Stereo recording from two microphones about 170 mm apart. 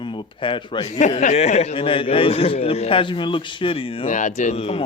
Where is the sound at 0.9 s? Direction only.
45° left (ahead or behind).